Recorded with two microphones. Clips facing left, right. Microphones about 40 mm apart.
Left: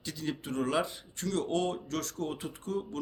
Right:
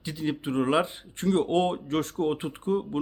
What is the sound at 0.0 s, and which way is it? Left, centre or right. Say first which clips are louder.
Speech: right 6 dB; right.